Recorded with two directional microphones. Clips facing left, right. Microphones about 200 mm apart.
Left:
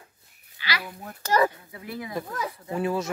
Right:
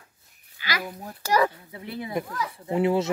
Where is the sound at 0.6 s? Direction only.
45° right (ahead or behind).